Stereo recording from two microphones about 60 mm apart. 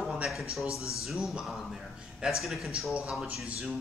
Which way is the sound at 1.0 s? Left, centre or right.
Centre.